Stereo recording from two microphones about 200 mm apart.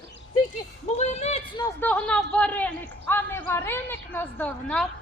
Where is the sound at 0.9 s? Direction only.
35° left (ahead or behind).